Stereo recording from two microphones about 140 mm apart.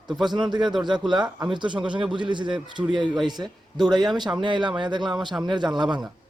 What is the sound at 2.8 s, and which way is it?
Speech, 20° right (ahead or behind).